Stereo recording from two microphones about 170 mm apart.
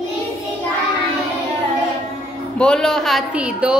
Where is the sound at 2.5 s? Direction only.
5° left (ahead or behind).